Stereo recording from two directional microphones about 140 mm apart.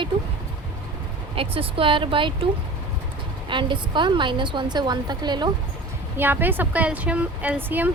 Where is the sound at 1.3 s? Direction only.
40° right (ahead or behind).